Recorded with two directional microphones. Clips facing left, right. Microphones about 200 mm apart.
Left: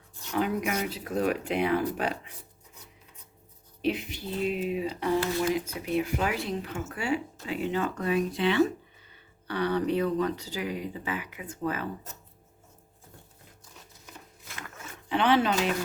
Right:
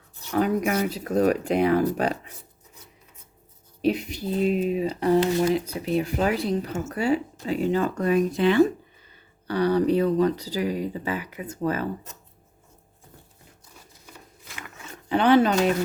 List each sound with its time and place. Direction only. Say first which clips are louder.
0.3 s speech: right 5 dB; 40° right (ahead or behind)
3.8 s speech: right 5 dB; 40° right (ahead or behind)
15.1 s speech: right 6 dB; 40° right (ahead or behind)